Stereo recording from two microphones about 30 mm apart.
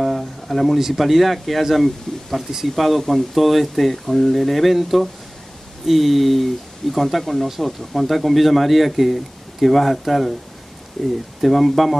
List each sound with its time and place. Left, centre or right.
0.0 s a sound: centre
0.9 s speech: centre
2.1 s speech: centre
2.7 s speech: centre